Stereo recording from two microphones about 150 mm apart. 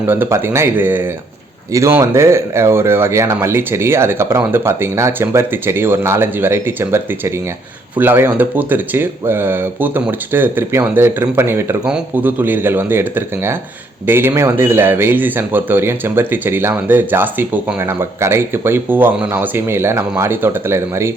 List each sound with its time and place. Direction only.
0.1 s a man's voice: 15° right (ahead or behind)